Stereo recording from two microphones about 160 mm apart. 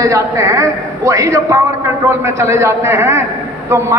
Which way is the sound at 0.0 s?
20° right (ahead or behind).